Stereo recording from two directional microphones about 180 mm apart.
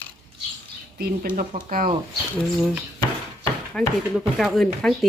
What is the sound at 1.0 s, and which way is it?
Speech, 50° right (ahead or behind).